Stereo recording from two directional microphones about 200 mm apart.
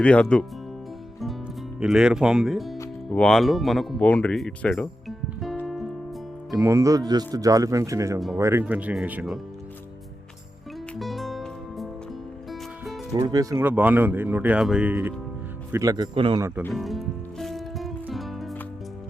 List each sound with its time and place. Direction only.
0.0 s speech: 5° left (ahead or behind)
1.8 s speech: 5° right (ahead or behind)
3.1 s music: centre (ahead or behind)
6.6 s speech: 15° right (ahead or behind)
11.0 s music: centre (ahead or behind)
13.1 s speech: 20° right (ahead or behind)
15.7 s speech: 20° right (ahead or behind)
16.7 s music: centre (ahead or behind)